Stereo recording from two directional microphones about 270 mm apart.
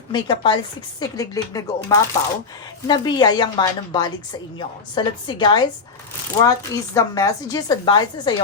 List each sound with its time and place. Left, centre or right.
0.1 s speech: centre